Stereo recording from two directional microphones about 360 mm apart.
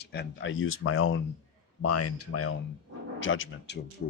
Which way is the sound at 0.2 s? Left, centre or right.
Left.